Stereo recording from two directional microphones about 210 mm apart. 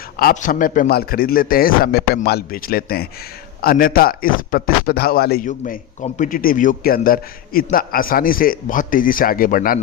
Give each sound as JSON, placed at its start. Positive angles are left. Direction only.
{"t": 0.2, "sound": "a man's voice", "side_deg": 40}